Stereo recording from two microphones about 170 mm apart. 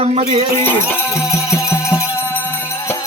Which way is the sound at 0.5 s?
15° left (ahead or behind).